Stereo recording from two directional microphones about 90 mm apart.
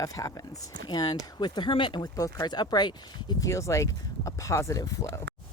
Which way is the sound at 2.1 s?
45° left (ahead or behind).